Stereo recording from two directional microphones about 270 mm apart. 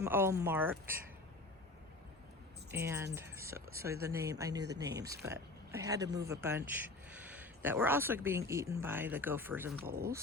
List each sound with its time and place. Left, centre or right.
0.0 s speech: centre
2.7 s speech: centre
9.8 s speech: right